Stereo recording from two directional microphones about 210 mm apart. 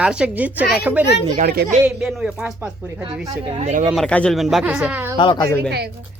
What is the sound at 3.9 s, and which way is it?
Speech, 5° left (ahead or behind).